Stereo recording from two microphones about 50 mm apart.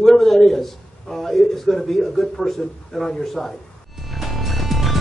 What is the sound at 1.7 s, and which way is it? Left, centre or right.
Speech, centre.